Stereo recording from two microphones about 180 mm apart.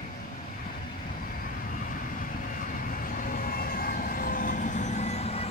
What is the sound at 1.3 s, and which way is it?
Vehicle, 50° left (ahead or behind).